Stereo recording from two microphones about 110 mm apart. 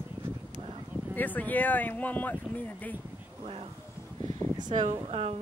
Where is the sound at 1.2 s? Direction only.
15° left (ahead or behind).